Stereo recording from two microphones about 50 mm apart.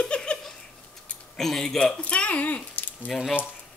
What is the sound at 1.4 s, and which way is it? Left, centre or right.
Speech, centre.